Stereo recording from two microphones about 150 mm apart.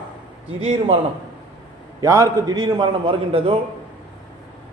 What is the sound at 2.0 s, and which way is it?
A man's voice, 20° right (ahead or behind).